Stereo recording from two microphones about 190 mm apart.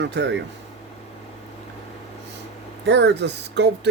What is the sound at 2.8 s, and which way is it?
Speech, 65° right (ahead or behind).